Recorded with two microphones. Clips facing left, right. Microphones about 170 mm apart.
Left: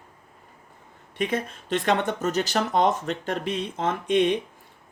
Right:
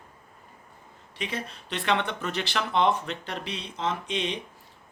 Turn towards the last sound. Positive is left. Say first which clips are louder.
# left 8 dB
turn(degrees=50)  # may be behind; listen again after turning